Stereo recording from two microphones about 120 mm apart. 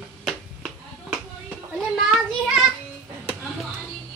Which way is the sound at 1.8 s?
5° right (ahead or behind).